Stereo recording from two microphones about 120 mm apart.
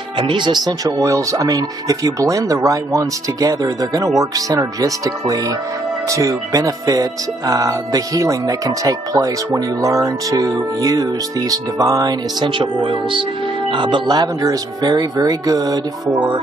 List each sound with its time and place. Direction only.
0.3 s speech: 40° right (ahead or behind)